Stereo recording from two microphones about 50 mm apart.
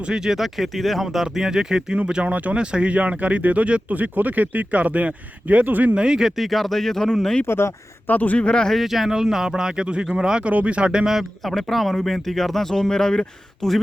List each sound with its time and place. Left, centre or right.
0.0 s speech: centre
2.3 s speech: right
2.6 s speech: right; by 7.4 s centre
7.4 s speech: left
8.0 s speech: left
8.4 s speech: centre
8.7 s speech: centre
10.4 s speech: right
11.1 s speech: centre